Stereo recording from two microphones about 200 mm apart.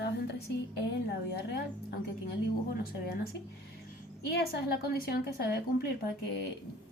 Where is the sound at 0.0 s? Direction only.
55° left (ahead or behind).